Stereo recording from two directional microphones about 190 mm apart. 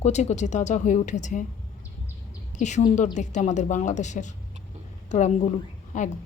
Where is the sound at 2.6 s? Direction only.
40° left (ahead or behind).